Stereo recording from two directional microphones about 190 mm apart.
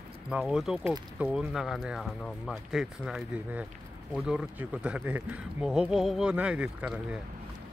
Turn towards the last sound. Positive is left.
turn(degrees=-5)  # may be behind; listen again after turning